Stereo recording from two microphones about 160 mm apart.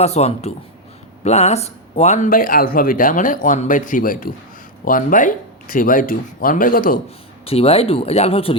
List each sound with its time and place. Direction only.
0.0 s speech: 40° left (ahead or behind); by 7.0 s 60° left (ahead or behind)
7.4 s speech: 35° left (ahead or behind)